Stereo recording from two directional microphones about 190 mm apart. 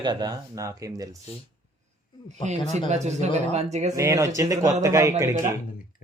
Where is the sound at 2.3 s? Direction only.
35° right (ahead or behind).